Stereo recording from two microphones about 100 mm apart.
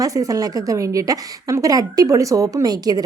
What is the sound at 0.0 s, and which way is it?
A woman's voice, 35° right (ahead or behind).